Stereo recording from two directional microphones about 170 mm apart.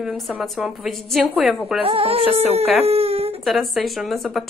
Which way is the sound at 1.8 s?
35° right (ahead or behind).